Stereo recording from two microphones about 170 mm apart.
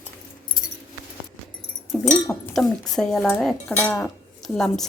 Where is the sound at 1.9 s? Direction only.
5° left (ahead or behind).